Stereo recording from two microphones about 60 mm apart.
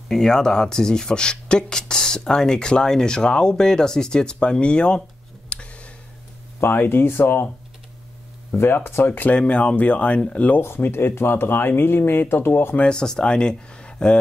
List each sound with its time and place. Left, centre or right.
0.1 s speech: centre
5.5 s a sound: centre
6.6 s speech: left
8.5 s speech: left
9.3 s speech: centre
10.6 s speech: left
12.7 s speech: centre